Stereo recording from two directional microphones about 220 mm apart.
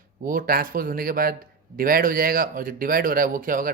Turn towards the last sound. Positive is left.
turn(degrees=-40)  # may be behind; listen again after turning